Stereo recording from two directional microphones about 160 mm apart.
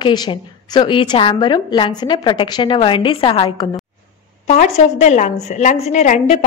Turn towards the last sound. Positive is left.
turn(degrees=45)  # may be behind; listen again after turning